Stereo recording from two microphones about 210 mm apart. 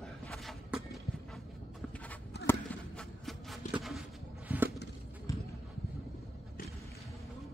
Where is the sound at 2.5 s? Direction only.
Centre (ahead or behind).